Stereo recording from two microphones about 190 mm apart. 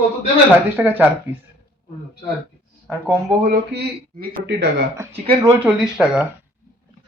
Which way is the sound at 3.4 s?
55° right (ahead or behind).